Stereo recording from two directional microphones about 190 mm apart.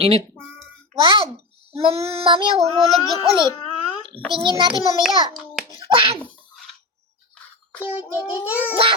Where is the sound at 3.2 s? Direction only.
25° right (ahead or behind).